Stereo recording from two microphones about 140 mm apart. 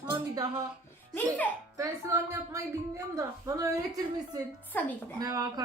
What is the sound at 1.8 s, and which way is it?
A woman's voice, 20° right (ahead or behind).